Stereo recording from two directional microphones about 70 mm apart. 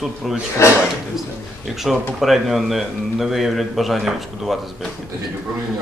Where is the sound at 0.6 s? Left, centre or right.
Left.